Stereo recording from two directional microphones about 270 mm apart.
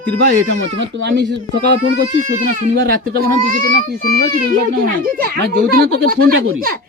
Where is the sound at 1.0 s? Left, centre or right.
Right.